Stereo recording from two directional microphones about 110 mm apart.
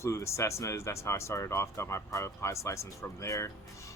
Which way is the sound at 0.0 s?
25° left (ahead or behind).